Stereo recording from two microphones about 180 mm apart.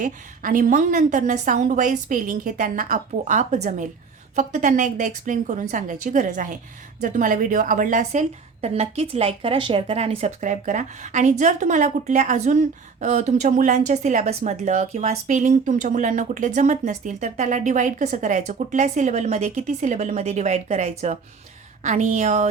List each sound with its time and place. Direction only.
0.0 s a woman's voice: 50° right (ahead or behind)
8.6 s speech: 35° right (ahead or behind)